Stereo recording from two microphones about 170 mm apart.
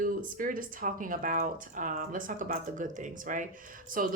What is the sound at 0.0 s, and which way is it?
Speech, 55° right (ahead or behind).